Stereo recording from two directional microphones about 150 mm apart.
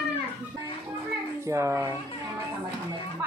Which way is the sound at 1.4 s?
20° right (ahead or behind).